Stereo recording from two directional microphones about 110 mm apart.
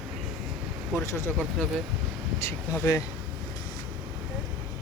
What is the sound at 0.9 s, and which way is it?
Speech, 25° left (ahead or behind).